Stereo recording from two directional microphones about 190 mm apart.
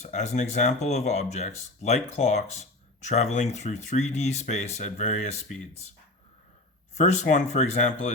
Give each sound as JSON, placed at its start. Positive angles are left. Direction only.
{"t": 0.0, "sound": "speech", "side_deg": 35}
{"t": 6.9, "sound": "speech", "side_deg": 40}